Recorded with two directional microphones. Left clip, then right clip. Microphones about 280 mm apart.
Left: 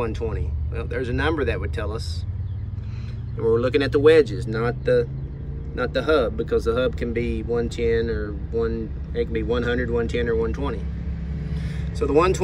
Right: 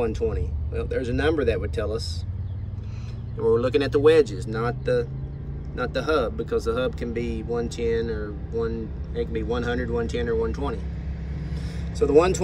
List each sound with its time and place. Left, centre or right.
0.0 s speech: centre
3.3 s speech: centre